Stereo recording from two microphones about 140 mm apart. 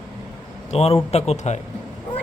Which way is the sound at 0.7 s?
50° left (ahead or behind).